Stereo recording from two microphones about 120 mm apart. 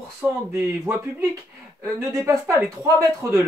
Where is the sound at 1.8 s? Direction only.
25° right (ahead or behind).